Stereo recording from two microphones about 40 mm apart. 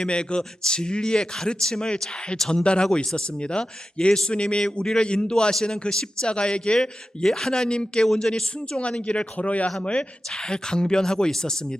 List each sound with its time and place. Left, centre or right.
0.0 s speech: left
2.4 s a man's voice: centre
2.8 s a man's voice: centre
6.2 s speech: left
7.2 s a man's voice: centre
8.0 s a man's voice: centre
9.0 s speech: left
10.3 s a man's voice: centre